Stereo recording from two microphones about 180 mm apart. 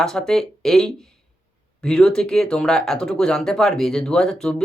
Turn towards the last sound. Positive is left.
turn(degrees=5)  # may be behind; listen again after turning